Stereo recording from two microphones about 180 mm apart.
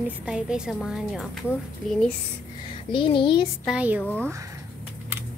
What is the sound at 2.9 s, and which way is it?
Speech, 30° left (ahead or behind).